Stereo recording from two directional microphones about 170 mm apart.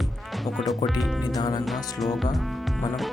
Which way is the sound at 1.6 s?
Centre (ahead or behind).